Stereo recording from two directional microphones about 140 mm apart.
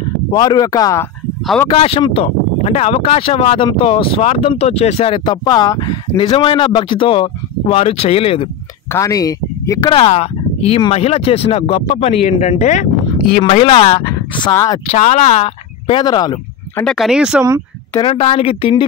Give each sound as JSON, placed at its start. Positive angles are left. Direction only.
{"t": 0.3, "sound": "speech", "side_deg": 30}
{"t": 1.7, "sound": "speech", "side_deg": 40}
{"t": 8.9, "sound": "speech", "side_deg": 25}
{"t": 10.0, "sound": "speech", "side_deg": 50}
{"t": 13.4, "sound": "speech", "side_deg": 40}
{"t": 14.5, "sound": "speech", "side_deg": 20}
{"t": 14.9, "sound": "speech", "side_deg": 50}
{"t": 15.9, "sound": "speech", "side_deg": 30}
{"t": 16.8, "sound": "speech", "side_deg": 0}
{"t": 18.0, "sound": "speech", "side_deg": 45}